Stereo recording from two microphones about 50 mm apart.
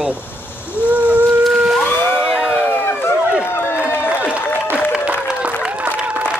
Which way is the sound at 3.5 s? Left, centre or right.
Left.